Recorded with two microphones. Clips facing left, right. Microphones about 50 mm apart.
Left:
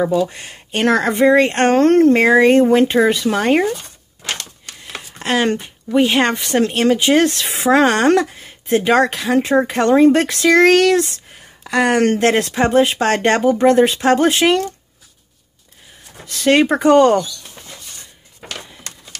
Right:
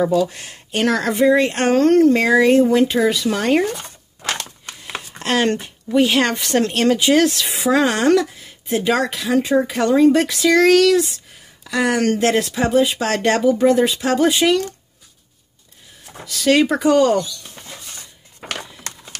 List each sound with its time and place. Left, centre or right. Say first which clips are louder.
0.0 s speech: even; centre
0.8 s speech: left 3 dB; left
5.2 s speech: left 1 dB; centre
7.0 s speech: even; left
7.2 s speech: left 2 dB; left
9.4 s speech: left 2 dB; left
16.3 s speech: left 2 dB; left